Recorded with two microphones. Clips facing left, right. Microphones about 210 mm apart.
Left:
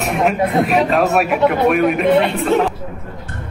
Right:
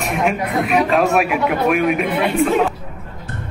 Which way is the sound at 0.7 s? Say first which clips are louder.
Left 1 dB; centre (ahead or behind).